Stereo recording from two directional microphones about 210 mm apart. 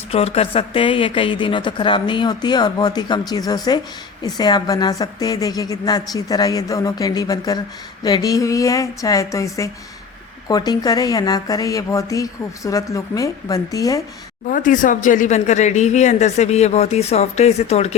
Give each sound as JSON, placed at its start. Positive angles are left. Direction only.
{"t": 0.1, "sound": "speech", "side_deg": 30}
{"t": 14.4, "sound": "speech", "side_deg": 40}